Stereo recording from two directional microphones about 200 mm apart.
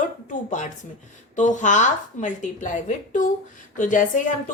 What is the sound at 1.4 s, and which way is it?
A woman's voice, 40° left (ahead or behind).